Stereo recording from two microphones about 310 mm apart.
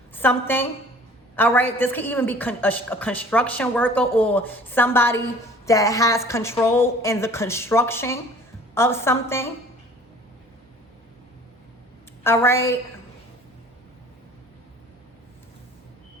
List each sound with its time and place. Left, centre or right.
0.1 s a woman's voice: centre
12.2 s a woman's voice: centre